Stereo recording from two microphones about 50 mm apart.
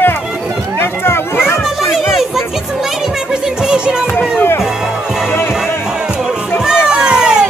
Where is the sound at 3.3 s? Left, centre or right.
Centre.